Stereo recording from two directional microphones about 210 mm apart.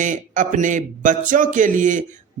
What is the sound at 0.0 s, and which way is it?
Speech, 35° right (ahead or behind).